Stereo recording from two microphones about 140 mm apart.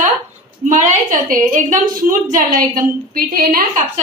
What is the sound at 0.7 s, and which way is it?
A woman's voice, 65° right (ahead or behind).